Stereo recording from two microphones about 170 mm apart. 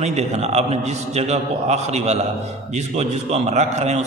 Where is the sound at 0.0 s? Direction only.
40° right (ahead or behind).